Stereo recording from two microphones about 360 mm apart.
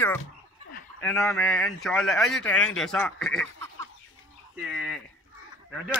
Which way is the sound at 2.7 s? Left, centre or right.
Centre.